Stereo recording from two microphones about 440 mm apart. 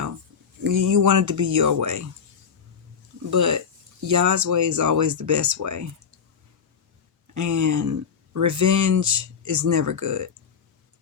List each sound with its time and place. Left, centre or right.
0.6 s speech: right
3.2 s speech: right
7.3 s speech: right